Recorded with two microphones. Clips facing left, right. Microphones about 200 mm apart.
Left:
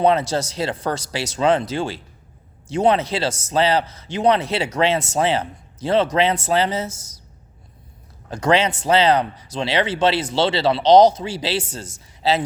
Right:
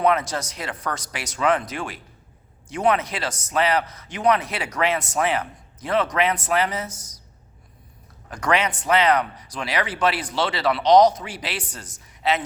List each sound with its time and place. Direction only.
0.0 s a man's voice: 30° left (ahead or behind)
8.3 s a man's voice: 25° left (ahead or behind)